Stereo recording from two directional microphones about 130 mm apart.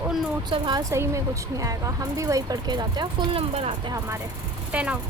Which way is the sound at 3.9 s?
25° right (ahead or behind).